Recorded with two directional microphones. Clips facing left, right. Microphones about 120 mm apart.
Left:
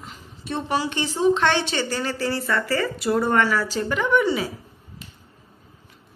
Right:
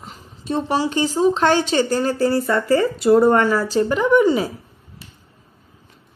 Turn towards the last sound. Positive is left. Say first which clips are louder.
# right 5 dB
turn(degrees=-40)  # may be behind; listen again after turning